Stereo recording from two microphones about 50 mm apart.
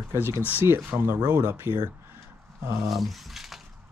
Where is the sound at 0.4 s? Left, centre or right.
Right.